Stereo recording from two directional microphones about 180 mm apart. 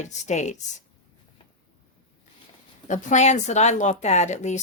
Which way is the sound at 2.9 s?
45° left (ahead or behind).